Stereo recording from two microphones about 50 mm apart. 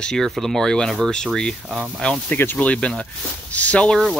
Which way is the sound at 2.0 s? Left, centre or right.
Left.